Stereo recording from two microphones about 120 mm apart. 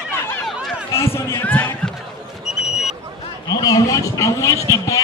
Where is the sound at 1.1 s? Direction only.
20° left (ahead or behind).